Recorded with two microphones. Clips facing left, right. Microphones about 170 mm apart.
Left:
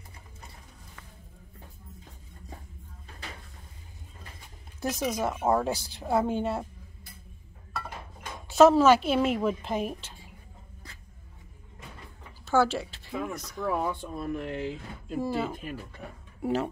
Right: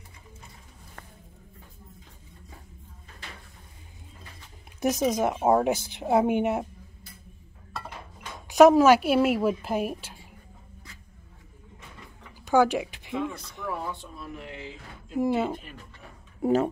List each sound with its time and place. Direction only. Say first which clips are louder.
4.7 s a woman's voice: right 5 dB; 20° right (ahead or behind)
8.5 s a woman's voice: right 2 dB; 15° right (ahead or behind)
12.4 s a sound: right 3 dB; 15° right (ahead or behind)
13.2 s a woman's voice: right 2 dB; 30° right (ahead or behind)
13.7 s speech: left 5 dB; 50° left (ahead or behind)
15.1 s a woman's voice: right 5 dB; 20° right (ahead or behind)